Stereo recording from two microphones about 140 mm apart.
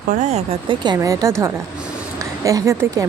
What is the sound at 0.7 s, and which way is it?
Speech, 35° right (ahead or behind).